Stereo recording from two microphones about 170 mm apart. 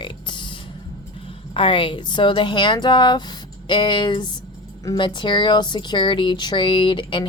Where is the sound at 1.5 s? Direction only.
30° left (ahead or behind).